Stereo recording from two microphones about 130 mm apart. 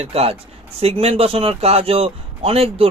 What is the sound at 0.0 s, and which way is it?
Speech, 50° right (ahead or behind).